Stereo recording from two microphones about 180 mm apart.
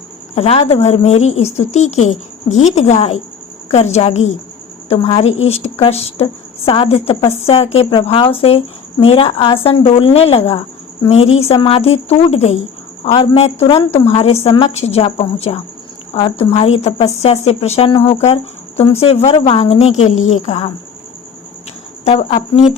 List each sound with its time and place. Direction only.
0.3 s speech: 35° left (ahead or behind)
22.0 s speech: 35° left (ahead or behind)